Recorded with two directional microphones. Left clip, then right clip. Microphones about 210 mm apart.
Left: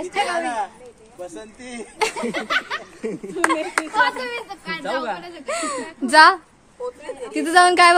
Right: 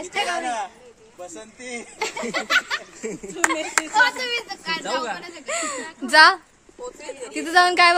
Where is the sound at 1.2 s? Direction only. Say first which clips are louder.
Left 2 dB; 30° right (ahead or behind).